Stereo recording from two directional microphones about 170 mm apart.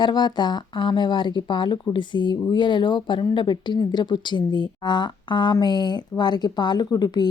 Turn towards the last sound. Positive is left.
turn(degrees=25)  # may be behind; listen again after turning